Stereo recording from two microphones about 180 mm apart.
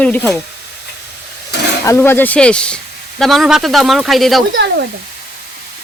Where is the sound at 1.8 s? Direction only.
15° left (ahead or behind).